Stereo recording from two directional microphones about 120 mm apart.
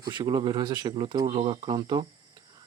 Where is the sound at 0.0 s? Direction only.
35° right (ahead or behind).